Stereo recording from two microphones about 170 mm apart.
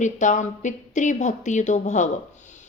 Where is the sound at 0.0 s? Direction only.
45° left (ahead or behind).